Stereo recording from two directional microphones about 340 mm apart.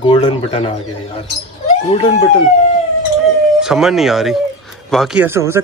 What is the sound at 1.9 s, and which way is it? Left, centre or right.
Speech, centre.